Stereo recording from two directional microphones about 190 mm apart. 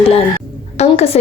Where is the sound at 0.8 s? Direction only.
35° left (ahead or behind).